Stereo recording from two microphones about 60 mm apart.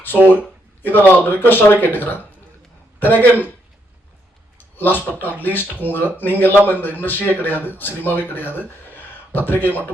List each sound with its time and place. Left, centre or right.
0.3 s speech: left
4.8 s speech: left
8.3 s a sound: left
9.5 s speech: left